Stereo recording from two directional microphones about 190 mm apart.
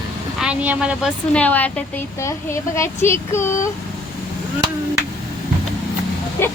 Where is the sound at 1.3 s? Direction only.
5° left (ahead or behind).